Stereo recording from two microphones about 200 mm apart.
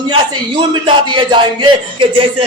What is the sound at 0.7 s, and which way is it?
Speech, 25° right (ahead or behind).